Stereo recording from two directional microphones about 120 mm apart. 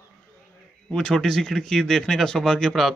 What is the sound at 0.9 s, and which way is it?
Speech, 5° left (ahead or behind).